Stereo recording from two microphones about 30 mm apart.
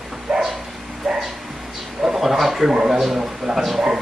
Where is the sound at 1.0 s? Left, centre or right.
Centre.